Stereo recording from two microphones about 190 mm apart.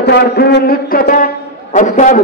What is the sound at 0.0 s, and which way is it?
A man's voice, 60° left (ahead or behind).